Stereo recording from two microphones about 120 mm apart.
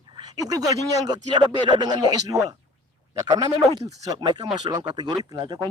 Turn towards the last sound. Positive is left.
turn(degrees=-35)  # may be behind; listen again after turning